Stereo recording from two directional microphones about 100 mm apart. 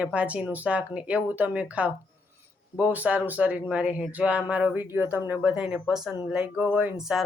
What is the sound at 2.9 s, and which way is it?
Speech, 15° right (ahead or behind).